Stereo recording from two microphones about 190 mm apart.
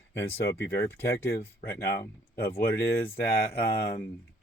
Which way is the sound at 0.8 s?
15° left (ahead or behind).